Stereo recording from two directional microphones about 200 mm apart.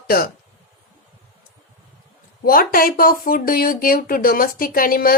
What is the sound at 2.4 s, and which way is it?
Speech, 45° left (ahead or behind).